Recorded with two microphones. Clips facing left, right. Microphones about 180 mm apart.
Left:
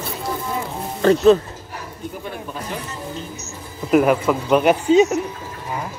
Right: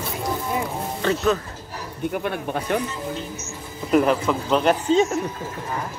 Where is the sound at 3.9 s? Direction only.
10° left (ahead or behind).